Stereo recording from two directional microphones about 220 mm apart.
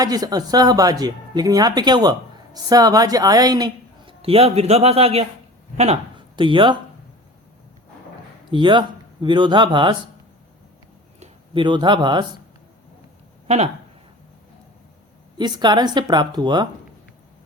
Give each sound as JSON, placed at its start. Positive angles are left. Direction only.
{"t": 0.0, "sound": "speech", "side_deg": -15}
{"t": 8.4, "sound": "a woman's voice", "side_deg": -20}
{"t": 11.2, "sound": "speech", "side_deg": -20}
{"t": 15.4, "sound": "a woman's voice", "side_deg": -20}